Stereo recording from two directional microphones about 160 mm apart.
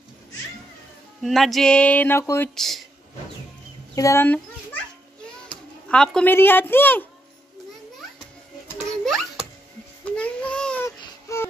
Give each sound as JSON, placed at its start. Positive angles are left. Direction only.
{"t": 1.2, "sound": "speech", "side_deg": 0}
{"t": 2.5, "sound": "speech", "side_deg": 0}
{"t": 3.9, "sound": "speech", "side_deg": 20}
{"t": 5.9, "sound": "speech", "side_deg": 5}
{"t": 9.0, "sound": "a sound", "side_deg": 0}
{"t": 11.0, "sound": "baby cry", "side_deg": 20}